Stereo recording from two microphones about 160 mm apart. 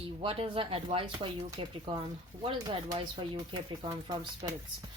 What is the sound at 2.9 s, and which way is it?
A woman's voice, 30° right (ahead or behind).